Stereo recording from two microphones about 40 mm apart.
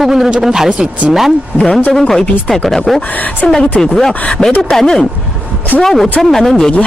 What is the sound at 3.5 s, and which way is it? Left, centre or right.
Speech, centre.